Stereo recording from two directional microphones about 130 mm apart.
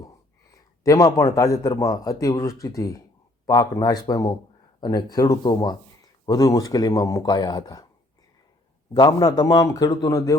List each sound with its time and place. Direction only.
0.9 s a man's voice: 25° left (ahead or behind)
8.9 s a man's voice: 30° left (ahead or behind)